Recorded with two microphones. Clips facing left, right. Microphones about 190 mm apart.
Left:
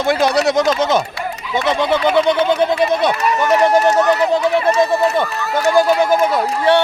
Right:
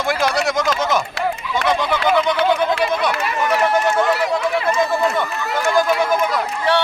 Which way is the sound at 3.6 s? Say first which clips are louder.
Left 4 dB; 35° left (ahead or behind).